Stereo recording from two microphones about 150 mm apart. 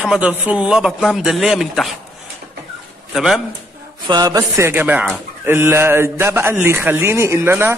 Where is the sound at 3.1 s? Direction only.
Centre (ahead or behind).